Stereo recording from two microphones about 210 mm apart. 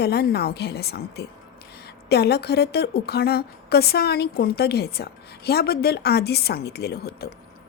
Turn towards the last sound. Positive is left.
turn(degrees=50)  # may be behind; listen again after turning